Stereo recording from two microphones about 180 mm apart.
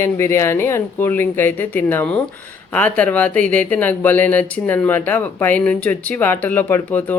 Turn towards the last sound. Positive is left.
turn(degrees=10)  # may be behind; listen again after turning